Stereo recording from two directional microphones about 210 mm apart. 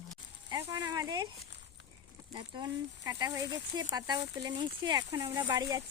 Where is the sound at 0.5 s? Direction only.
20° right (ahead or behind).